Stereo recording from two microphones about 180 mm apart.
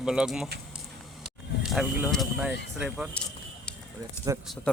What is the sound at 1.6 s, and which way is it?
Speech, 5° right (ahead or behind).